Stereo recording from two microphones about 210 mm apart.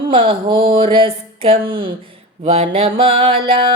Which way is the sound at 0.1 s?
25° right (ahead or behind).